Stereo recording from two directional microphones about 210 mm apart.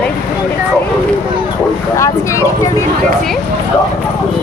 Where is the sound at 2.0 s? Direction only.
15° left (ahead or behind).